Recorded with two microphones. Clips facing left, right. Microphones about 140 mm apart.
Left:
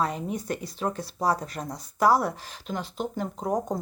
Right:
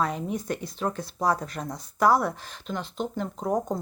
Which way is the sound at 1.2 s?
35° left (ahead or behind).